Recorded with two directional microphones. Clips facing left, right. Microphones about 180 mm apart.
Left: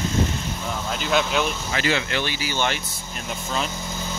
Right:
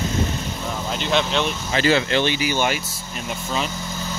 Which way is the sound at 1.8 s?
35° right (ahead or behind).